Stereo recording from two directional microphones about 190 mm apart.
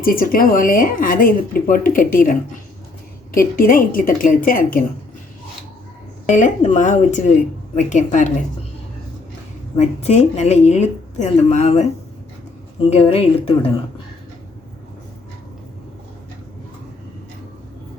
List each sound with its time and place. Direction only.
0.0 s a woman's voice: 50° left (ahead or behind)
6.3 s speech: 40° left (ahead or behind)
9.7 s speech: 35° left (ahead or behind)
12.9 s speech: 30° left (ahead or behind)